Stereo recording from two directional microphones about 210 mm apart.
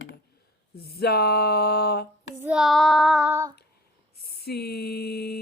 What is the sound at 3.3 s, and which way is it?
Female singing, 15° right (ahead or behind).